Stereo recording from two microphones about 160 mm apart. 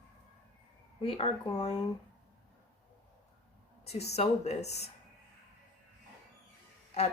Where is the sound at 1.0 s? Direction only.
35° left (ahead or behind).